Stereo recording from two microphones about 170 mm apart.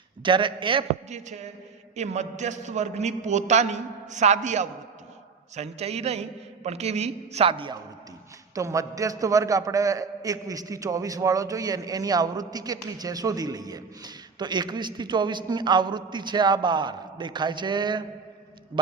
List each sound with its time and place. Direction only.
0.2 s a man's voice: 30° right (ahead or behind)
2.0 s a man's voice: 40° right (ahead or behind)
8.5 s a man's voice: 20° right (ahead or behind)